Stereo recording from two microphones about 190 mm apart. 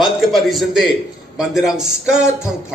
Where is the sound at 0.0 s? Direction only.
Centre (ahead or behind).